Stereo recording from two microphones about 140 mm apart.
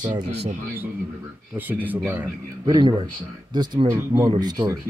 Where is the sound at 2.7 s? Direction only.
35° right (ahead or behind).